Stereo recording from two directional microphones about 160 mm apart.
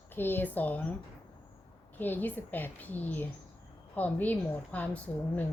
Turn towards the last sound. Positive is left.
turn(degrees=10)  # may be behind; listen again after turning